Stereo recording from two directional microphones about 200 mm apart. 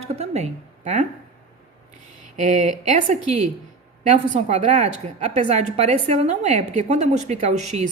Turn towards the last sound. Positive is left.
turn(degrees=-35)  # may be behind; listen again after turning